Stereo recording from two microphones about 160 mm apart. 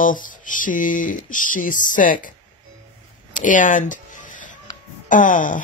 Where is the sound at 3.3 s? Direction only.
55° left (ahead or behind).